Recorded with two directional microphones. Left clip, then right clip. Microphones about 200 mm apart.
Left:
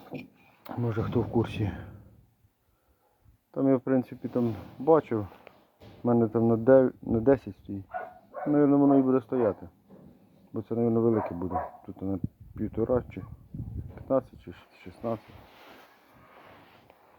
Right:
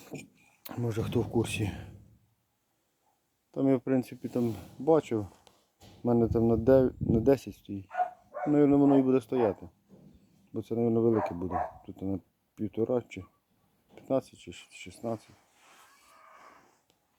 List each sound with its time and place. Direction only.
0.1 s a sound: 20° left (ahead or behind)
0.6 s speech: 15° right (ahead or behind)
3.5 s speech: 20° right (ahead or behind)
8.5 s speech: 30° right (ahead or behind)